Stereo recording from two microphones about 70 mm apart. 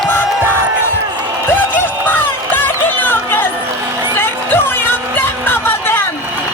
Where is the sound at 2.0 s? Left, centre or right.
Left.